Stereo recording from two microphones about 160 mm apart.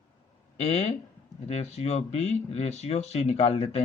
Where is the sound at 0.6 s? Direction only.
40° left (ahead or behind).